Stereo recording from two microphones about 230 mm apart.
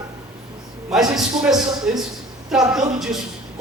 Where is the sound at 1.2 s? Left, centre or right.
Centre.